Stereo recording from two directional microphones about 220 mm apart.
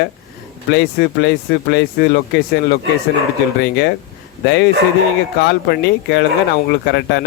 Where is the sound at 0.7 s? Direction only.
50° left (ahead or behind).